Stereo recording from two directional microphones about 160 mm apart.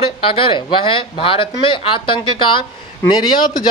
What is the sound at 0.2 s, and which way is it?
Speech, 35° left (ahead or behind).